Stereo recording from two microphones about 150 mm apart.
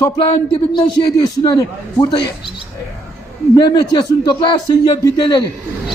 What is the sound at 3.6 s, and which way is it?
A man's voice, 30° left (ahead or behind).